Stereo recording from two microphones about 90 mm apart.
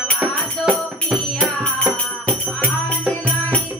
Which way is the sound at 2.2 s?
15° left (ahead or behind).